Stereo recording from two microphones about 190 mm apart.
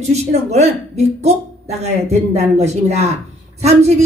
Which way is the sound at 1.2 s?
35° right (ahead or behind).